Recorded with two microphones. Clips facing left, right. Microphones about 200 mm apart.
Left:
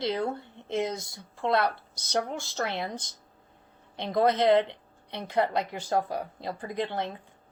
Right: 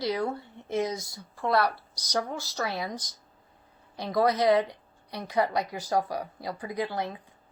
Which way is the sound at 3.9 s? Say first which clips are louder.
Left 1 dB; 25° left (ahead or behind).